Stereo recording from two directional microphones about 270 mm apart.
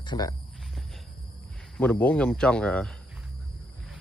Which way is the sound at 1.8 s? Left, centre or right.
Centre.